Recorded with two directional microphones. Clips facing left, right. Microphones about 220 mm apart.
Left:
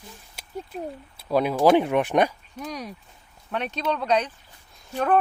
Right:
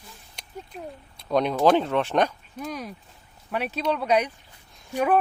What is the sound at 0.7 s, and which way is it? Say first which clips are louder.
Speech: left 5 dB; 40° left (ahead or behind).